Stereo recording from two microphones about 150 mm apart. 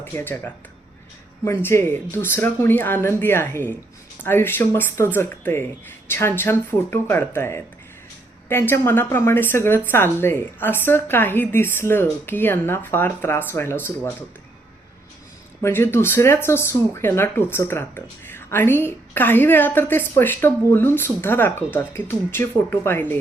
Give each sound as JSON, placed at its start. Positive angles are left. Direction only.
{"t": 0.0, "sound": "speech", "side_deg": 15}
{"t": 15.6, "sound": "speech", "side_deg": 15}